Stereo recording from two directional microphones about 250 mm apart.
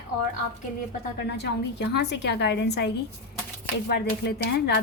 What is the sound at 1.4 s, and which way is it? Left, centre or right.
A woman's voice, left.